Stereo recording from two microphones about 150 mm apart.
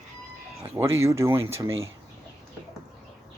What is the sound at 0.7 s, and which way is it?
Speech, 15° right (ahead or behind).